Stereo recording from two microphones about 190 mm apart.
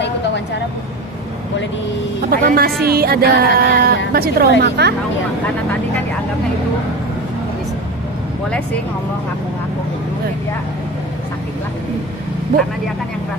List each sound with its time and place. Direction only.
2.2 s speech: 50° right (ahead or behind)